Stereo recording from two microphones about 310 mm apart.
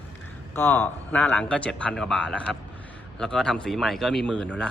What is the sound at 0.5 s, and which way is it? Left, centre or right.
A man's voice, centre.